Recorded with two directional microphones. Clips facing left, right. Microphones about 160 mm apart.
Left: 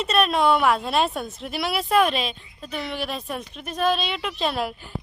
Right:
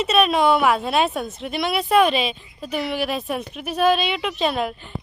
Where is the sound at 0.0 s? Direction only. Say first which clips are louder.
Right 3 dB; centre (ahead or behind).